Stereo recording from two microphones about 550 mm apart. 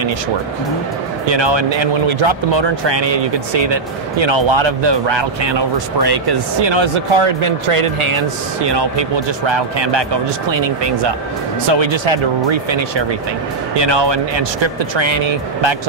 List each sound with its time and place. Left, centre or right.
1.3 s speech: right
8.6 s speech: right